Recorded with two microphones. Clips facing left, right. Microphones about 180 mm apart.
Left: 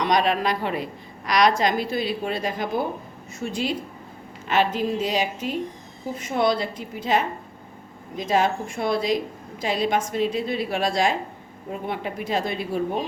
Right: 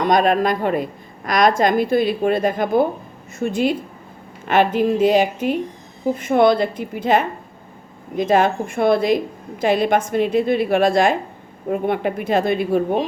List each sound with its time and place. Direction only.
0.0 s a woman's voice: 50° right (ahead or behind)